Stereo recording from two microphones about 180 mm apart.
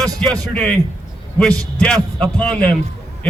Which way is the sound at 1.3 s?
5° left (ahead or behind).